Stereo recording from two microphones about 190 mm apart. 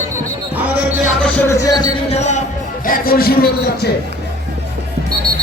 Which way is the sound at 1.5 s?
20° left (ahead or behind).